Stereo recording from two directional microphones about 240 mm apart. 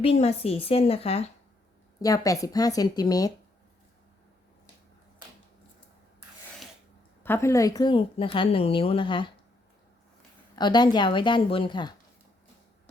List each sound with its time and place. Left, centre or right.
0.0 s a woman's voice: left
2.0 s speech: centre
7.2 s a woman's voice: centre
10.5 s a woman's voice: centre